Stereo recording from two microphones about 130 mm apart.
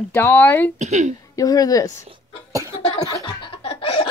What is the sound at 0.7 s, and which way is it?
Speech, 65° right (ahead or behind).